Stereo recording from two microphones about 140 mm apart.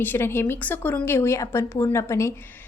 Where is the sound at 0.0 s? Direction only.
15° left (ahead or behind).